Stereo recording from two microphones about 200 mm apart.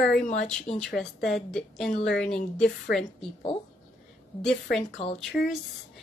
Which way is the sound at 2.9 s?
50° left (ahead or behind).